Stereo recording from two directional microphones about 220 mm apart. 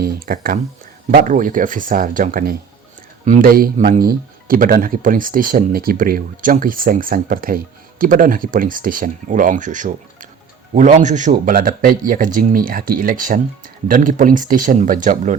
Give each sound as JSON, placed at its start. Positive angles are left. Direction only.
{"t": 0.0, "sound": "speech", "side_deg": -40}